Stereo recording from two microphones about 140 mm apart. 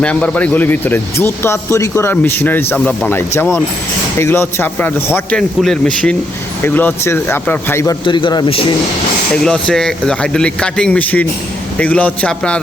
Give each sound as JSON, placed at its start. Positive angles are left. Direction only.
{"t": 0.0, "sound": "speech", "side_deg": 10}
{"t": 2.7, "sound": "speech", "side_deg": 5}
{"t": 3.1, "sound": "speech", "side_deg": 15}
{"t": 5.4, "sound": "speech", "side_deg": 5}
{"t": 8.0, "sound": "a man's voice", "side_deg": 35}
{"t": 9.3, "sound": "speech", "side_deg": 5}